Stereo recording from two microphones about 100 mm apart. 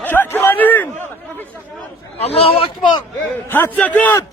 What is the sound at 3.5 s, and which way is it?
Speech, 20° left (ahead or behind).